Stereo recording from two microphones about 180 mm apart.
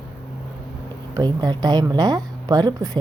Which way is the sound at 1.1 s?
25° right (ahead or behind).